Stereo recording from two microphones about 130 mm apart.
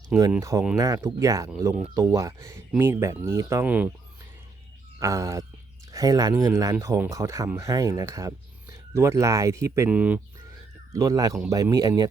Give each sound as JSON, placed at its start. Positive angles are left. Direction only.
{"t": 0.3, "sound": "speech", "side_deg": -25}
{"t": 4.9, "sound": "speech", "side_deg": -25}
{"t": 9.9, "sound": "speech", "side_deg": -10}
{"t": 10.9, "sound": "speech", "side_deg": -25}